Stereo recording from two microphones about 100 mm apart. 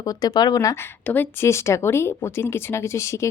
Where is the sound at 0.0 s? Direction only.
40° left (ahead or behind).